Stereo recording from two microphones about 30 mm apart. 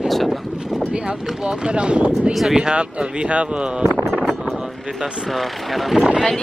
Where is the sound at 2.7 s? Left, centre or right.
Right.